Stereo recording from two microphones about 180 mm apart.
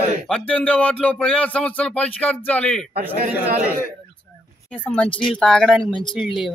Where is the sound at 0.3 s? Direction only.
10° left (ahead or behind).